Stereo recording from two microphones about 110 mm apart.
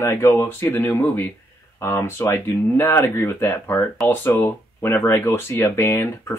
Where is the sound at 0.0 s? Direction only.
20° left (ahead or behind).